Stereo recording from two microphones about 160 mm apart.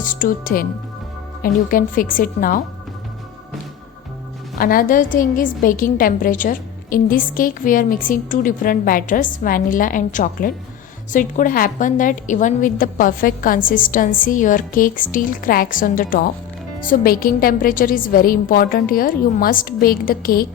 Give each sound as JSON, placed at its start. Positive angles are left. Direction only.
{"t": 0.0, "sound": "a woman's voice", "side_deg": 60}
{"t": 4.5, "sound": "a woman's voice", "side_deg": 60}